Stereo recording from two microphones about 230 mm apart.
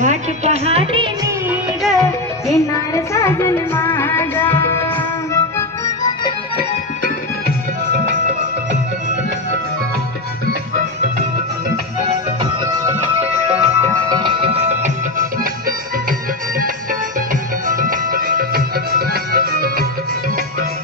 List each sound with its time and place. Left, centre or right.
0.0 s music: right
1.8 s music: centre
2.5 s music: centre
5.3 s organ: centre
12.6 s music: centre
14.1 s music: right